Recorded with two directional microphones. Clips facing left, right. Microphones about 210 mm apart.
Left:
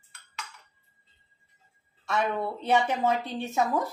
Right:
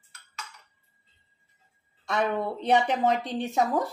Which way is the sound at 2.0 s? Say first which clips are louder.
Right 1 dB; 20° right (ahead or behind).